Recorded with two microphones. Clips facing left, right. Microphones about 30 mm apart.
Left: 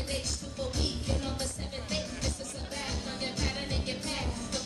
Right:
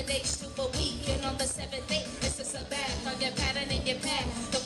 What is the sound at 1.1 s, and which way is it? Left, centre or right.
Music, right.